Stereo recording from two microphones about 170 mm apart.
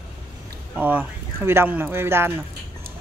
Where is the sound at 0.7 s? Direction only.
10° right (ahead or behind).